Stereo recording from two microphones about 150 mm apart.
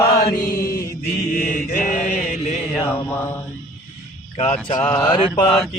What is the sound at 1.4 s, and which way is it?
Mantra, 60° left (ahead or behind).